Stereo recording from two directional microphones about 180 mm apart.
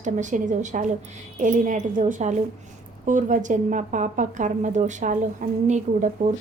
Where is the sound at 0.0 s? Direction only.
45° right (ahead or behind).